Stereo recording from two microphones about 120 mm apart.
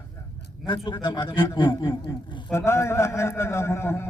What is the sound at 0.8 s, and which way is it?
A man's voice, 40° left (ahead or behind).